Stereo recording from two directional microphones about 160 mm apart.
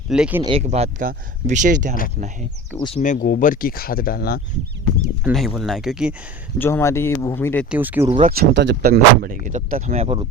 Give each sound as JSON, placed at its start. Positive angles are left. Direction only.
{"t": 0.1, "sound": "speech", "side_deg": -10}
{"t": 0.6, "sound": "speech", "side_deg": -45}
{"t": 2.7, "sound": "speech", "side_deg": 30}
{"t": 3.2, "sound": "speech", "side_deg": 65}
{"t": 5.2, "sound": "speech", "side_deg": 0}
{"t": 6.6, "sound": "speech", "side_deg": 15}
{"t": 7.7, "sound": "speech", "side_deg": -10}
{"t": 8.3, "sound": "speech", "side_deg": -80}